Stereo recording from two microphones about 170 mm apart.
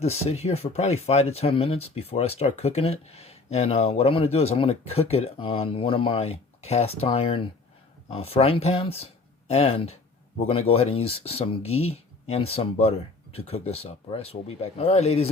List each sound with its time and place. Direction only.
0.0 s speech: 40° left (ahead or behind)